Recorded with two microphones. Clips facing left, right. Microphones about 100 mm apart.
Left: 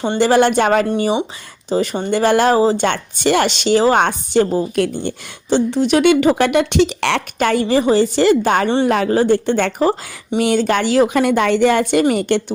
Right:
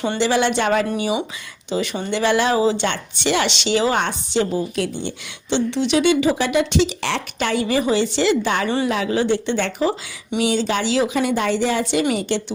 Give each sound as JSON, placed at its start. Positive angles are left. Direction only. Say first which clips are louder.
{"t": 0.2, "sound": "speech", "louder": "left 7 dB", "side_deg": 50}
{"t": 0.9, "sound": "speech", "louder": "left 5 dB", "side_deg": 35}
{"t": 7.7, "sound": "speech", "louder": "left 5 dB", "side_deg": 35}
{"t": 8.6, "sound": "speech", "louder": "left 5 dB", "side_deg": 30}
{"t": 8.9, "sound": "speech", "louder": "left 5 dB", "side_deg": 50}